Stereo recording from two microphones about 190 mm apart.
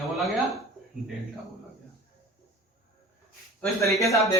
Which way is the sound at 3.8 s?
15° left (ahead or behind).